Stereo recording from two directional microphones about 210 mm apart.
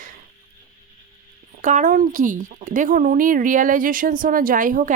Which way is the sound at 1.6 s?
35° right (ahead or behind).